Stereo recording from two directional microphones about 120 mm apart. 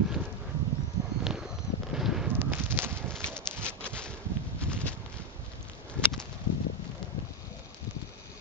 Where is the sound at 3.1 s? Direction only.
5° left (ahead or behind).